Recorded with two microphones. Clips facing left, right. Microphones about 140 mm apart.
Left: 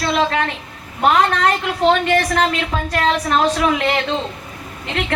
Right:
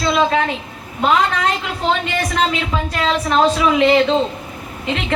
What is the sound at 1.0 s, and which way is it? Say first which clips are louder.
A woman's voice: left 1 dB; 50° left (ahead or behind).